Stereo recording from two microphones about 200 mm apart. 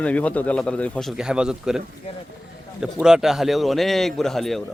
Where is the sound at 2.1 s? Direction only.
30° left (ahead or behind).